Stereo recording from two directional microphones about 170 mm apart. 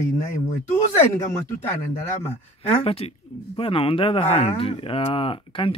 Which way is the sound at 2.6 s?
35° left (ahead or behind).